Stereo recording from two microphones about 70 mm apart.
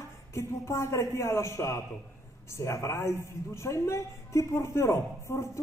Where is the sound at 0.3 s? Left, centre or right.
Left.